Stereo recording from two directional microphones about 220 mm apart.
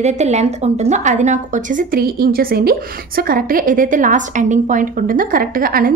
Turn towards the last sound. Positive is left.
turn(degrees=-40)  # may be behind; listen again after turning